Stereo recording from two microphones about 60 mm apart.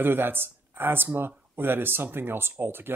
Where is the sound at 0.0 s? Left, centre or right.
Right.